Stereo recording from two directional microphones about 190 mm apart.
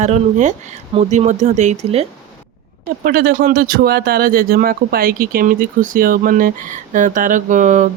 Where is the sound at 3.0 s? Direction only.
50° right (ahead or behind).